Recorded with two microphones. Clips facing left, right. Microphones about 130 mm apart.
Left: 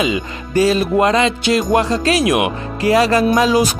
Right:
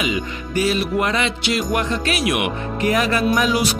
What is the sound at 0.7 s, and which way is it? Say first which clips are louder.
Music: left 5 dB; 35° left (ahead or behind).